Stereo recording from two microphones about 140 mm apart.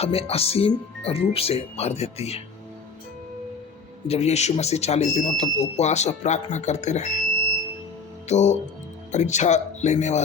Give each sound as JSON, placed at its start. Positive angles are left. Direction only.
{"t": 0.0, "sound": "speech", "side_deg": 45}
{"t": 4.1, "sound": "speech", "side_deg": 50}
{"t": 8.3, "sound": "speech", "side_deg": 55}